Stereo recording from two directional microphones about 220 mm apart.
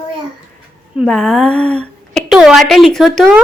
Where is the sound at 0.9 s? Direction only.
Centre (ahead or behind).